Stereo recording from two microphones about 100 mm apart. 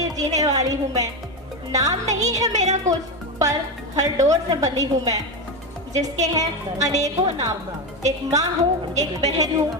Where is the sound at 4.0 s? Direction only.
35° right (ahead or behind).